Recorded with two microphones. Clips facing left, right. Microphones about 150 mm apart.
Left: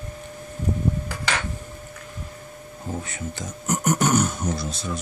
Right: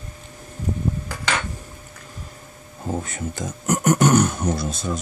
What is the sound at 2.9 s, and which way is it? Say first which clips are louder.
Speech: right 4 dB; 45° right (ahead or behind).